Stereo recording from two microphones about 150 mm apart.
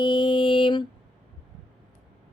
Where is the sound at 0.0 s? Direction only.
30° left (ahead or behind).